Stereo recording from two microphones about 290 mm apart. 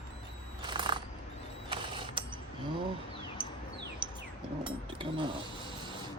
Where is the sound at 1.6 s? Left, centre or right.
Centre.